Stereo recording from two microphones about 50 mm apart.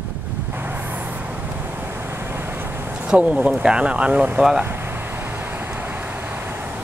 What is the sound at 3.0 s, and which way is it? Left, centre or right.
Speech, right.